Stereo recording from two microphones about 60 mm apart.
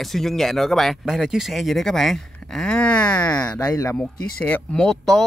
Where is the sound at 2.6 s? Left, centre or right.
Centre.